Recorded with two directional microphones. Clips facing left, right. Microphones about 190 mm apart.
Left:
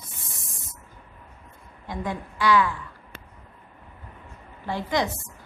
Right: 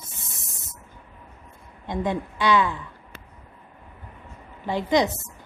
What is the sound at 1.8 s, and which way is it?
Speech, 20° right (ahead or behind).